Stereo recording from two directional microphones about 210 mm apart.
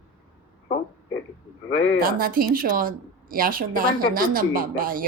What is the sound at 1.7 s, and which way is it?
Speech, 65° left (ahead or behind).